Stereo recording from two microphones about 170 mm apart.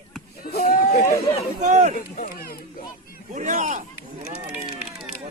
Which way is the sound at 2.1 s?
55° left (ahead or behind).